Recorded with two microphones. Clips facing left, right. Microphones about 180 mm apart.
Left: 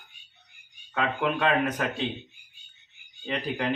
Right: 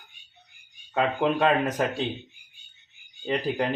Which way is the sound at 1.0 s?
40° right (ahead or behind).